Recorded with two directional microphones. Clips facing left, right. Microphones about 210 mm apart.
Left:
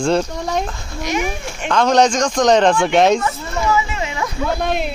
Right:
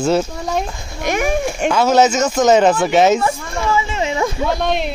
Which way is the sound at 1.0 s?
55° right (ahead or behind).